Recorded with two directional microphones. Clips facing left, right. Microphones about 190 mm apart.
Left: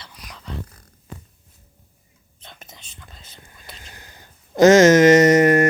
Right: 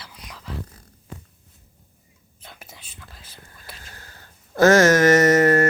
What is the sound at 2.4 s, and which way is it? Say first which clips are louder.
Whispering: even; 5° right (ahead or behind).